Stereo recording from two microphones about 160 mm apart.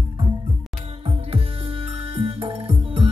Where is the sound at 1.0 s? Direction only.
35° right (ahead or behind).